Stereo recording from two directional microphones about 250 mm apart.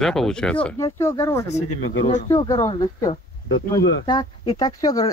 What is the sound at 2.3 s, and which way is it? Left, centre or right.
Speech, centre.